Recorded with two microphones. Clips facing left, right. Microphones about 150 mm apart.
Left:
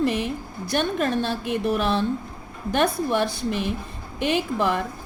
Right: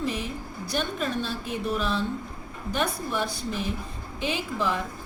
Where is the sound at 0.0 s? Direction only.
65° left (ahead or behind).